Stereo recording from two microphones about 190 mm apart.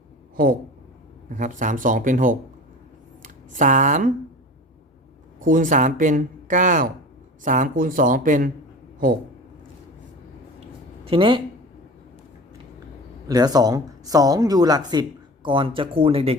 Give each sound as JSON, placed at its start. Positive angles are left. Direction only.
{"t": 1.4, "sound": "speech", "side_deg": -40}
{"t": 5.5, "sound": "speech", "side_deg": -40}
{"t": 11.0, "sound": "speech", "side_deg": -30}
{"t": 13.2, "sound": "speech", "side_deg": -20}